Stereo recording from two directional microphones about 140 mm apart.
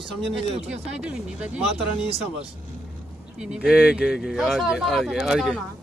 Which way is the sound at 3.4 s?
5° right (ahead or behind).